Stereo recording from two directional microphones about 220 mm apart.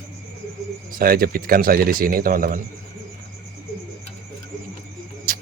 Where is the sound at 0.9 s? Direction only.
40° right (ahead or behind).